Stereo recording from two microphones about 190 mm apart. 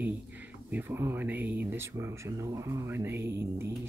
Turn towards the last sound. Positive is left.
turn(degrees=-15)  # may be behind; listen again after turning